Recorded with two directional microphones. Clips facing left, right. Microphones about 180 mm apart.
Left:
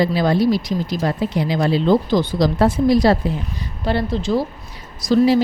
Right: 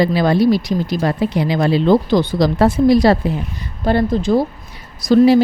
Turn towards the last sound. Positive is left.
turn(degrees=-60)  # may be behind; listen again after turning